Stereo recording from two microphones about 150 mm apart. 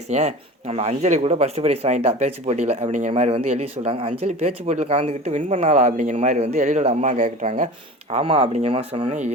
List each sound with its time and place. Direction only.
0.1 s speech: 50° right (ahead or behind)
3.2 s speech: 40° right (ahead or behind); by 7.7 s 55° right (ahead or behind)
8.1 s speech: 40° right (ahead or behind)